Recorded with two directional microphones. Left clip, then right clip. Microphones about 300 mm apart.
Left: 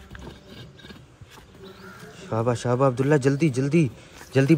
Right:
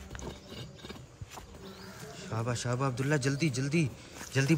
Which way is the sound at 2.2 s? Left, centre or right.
Centre.